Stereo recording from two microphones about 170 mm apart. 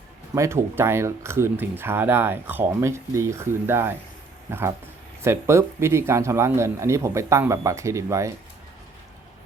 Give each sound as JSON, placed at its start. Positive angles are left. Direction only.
{"t": 0.3, "sound": "speech", "side_deg": -15}